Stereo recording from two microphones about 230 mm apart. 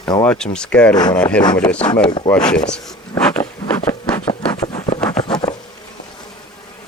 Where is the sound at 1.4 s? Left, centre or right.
Centre.